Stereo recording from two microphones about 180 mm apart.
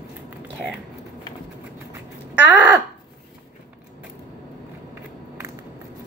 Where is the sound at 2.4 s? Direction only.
10° right (ahead or behind).